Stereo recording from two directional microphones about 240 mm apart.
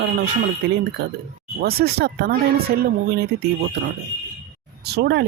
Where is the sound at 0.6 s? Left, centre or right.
Right.